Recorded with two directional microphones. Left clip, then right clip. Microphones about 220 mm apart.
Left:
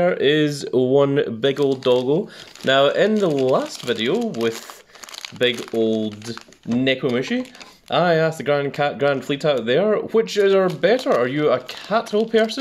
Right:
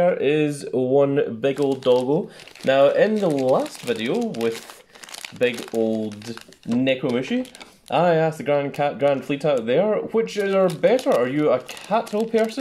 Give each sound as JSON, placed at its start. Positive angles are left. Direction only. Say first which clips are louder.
{"t": 0.0, "sound": "speech", "louder": "left 2 dB", "side_deg": 40}
{"t": 6.8, "sound": "speech", "louder": "left 2 dB", "side_deg": 40}